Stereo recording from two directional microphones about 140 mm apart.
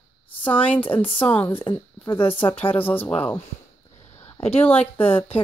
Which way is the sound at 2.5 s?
10° left (ahead or behind).